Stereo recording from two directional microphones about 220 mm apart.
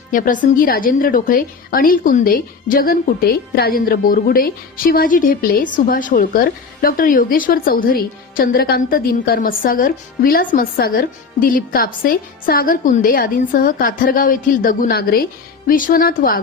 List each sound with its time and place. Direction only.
0.1 s a woman's voice: 35° left (ahead or behind)